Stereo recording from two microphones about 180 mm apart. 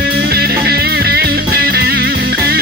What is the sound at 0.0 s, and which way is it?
Music, 60° right (ahead or behind).